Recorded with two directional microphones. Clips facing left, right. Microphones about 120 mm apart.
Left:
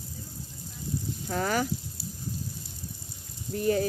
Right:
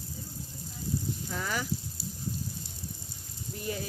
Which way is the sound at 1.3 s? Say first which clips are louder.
Left 8 dB; 50° left (ahead or behind).